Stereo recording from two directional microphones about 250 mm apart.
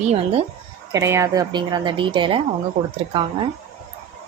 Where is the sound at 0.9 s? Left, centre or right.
Centre.